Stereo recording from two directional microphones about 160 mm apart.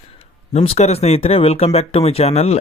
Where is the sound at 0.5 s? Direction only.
45° left (ahead or behind).